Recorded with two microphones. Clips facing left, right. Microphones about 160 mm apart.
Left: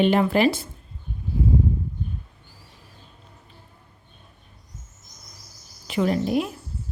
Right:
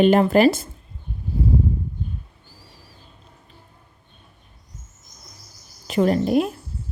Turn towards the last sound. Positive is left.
turn(degrees=-45)  # may be behind; listen again after turning